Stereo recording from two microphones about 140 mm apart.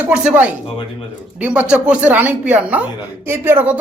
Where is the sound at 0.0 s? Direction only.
5° right (ahead or behind).